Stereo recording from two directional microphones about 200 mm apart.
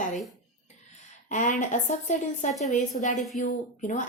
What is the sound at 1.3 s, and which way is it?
Speech, 40° left (ahead or behind).